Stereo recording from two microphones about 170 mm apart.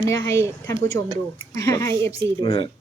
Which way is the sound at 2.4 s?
35° left (ahead or behind).